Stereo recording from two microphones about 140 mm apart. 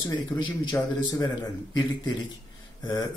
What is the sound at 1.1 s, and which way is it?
Speech, 25° left (ahead or behind).